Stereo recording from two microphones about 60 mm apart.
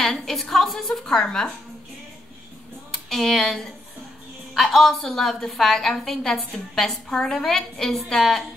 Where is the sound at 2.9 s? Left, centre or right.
Centre.